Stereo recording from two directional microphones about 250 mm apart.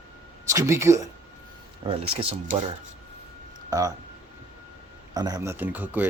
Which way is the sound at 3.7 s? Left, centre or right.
Centre.